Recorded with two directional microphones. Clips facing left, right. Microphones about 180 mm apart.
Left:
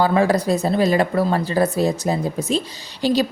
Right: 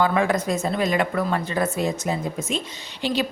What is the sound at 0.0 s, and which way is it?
A woman's voice, 35° left (ahead or behind).